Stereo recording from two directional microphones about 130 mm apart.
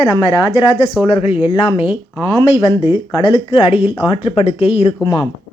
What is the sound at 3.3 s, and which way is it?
Speech, 45° left (ahead or behind).